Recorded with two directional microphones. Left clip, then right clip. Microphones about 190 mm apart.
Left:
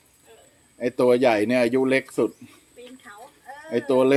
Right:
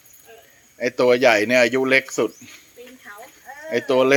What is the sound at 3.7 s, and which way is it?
Speech, centre (ahead or behind).